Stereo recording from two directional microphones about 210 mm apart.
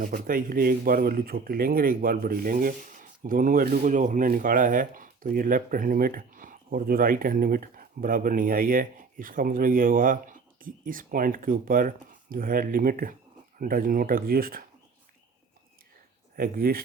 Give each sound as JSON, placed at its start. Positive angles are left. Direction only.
{"t": 0.0, "sound": "speech", "side_deg": -40}
{"t": 16.3, "sound": "speech", "side_deg": -45}